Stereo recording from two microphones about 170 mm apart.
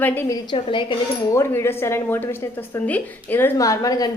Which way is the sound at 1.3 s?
15° left (ahead or behind).